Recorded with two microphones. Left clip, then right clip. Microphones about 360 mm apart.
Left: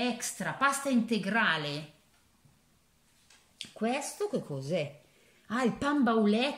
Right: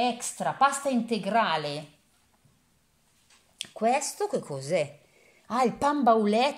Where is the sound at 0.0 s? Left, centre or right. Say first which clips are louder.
Right 6 dB; centre.